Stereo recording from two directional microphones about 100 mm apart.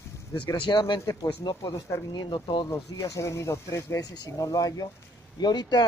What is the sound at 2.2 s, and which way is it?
Speech, 50° left (ahead or behind).